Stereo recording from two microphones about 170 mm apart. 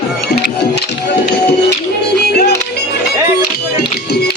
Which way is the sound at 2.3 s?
75° left (ahead or behind).